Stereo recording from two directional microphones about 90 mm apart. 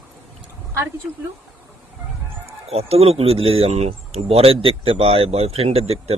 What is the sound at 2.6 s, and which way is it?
Speech, 90° right.